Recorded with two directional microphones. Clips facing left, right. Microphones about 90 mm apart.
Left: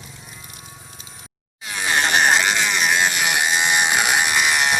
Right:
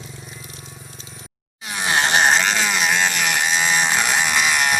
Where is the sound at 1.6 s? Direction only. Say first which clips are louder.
Right 1 dB; 10° right (ahead or behind).